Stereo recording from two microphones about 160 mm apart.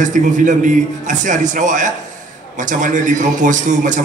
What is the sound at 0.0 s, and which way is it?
A man's voice, 50° right (ahead or behind).